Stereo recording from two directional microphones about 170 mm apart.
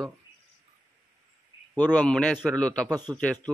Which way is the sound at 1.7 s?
10° left (ahead or behind).